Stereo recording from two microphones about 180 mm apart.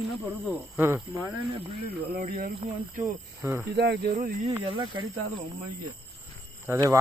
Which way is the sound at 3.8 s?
65° right (ahead or behind).